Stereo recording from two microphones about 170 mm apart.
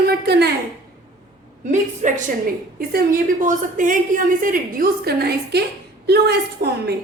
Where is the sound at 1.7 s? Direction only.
45° right (ahead or behind).